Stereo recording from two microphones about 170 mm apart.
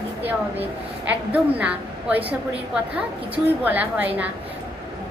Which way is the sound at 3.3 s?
10° right (ahead or behind).